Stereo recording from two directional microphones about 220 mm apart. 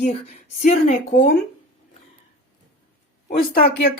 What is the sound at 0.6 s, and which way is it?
Speech, 30° left (ahead or behind).